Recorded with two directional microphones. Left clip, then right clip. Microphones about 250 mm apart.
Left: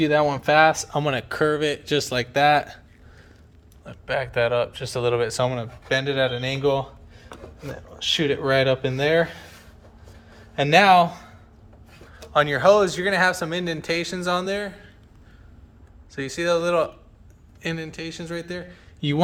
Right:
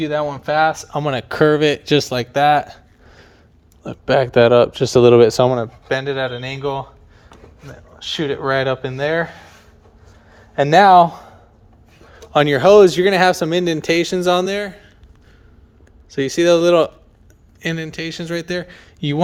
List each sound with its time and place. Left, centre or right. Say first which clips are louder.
0.0 s speech: left 1 dB; centre
7.9 s speech: even; centre
10.5 s a man's voice: right 6 dB; right
12.3 s speech: right 6 dB; right
16.0 s speech: right 9 dB; right